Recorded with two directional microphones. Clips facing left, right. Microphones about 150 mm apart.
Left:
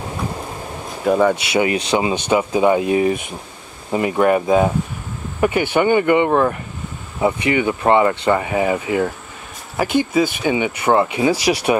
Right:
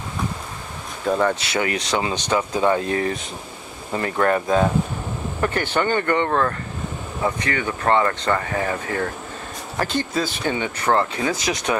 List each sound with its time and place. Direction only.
1.0 s speech: 10° left (ahead or behind)